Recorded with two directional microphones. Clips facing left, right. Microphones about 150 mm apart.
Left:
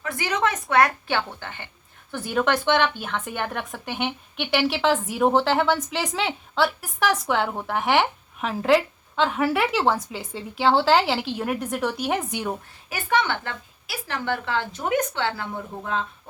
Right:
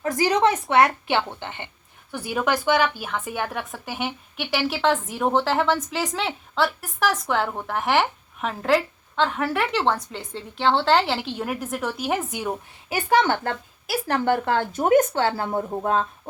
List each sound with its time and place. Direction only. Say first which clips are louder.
0.0 s speech: right 5 dB; 35° right (ahead or behind); by 1.7 s 20° right (ahead or behind)
2.1 s a woman's voice: left 1 dB; 10° right (ahead or behind)
12.9 s a woman's voice: right 4 dB; 35° right (ahead or behind)